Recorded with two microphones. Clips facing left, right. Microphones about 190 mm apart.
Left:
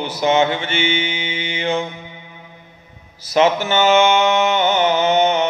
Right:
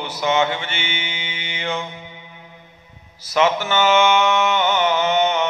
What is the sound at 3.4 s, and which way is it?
Mantra, 35° left (ahead or behind).